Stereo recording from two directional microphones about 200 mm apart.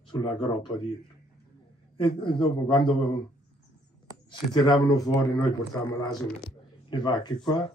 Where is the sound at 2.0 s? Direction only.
25° left (ahead or behind).